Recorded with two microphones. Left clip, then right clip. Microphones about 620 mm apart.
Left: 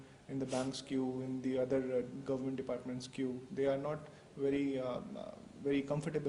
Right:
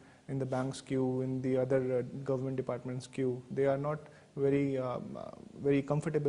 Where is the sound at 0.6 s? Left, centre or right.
Right.